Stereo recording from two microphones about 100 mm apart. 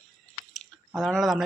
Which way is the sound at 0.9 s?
Centre (ahead or behind).